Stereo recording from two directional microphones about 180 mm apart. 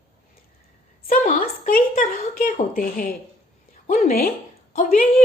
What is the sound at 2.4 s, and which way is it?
A woman's voice, 50° left (ahead or behind).